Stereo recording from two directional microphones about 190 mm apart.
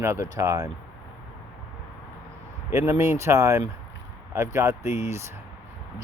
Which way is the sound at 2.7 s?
15° right (ahead or behind).